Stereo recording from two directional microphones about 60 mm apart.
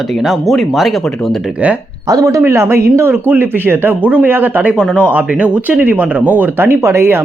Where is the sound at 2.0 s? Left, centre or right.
Right.